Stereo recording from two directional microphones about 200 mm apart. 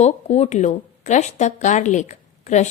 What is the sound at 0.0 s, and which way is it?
A woman's voice, 35° left (ahead or behind).